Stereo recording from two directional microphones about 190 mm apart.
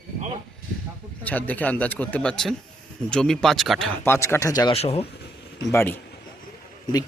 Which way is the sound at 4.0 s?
15° left (ahead or behind).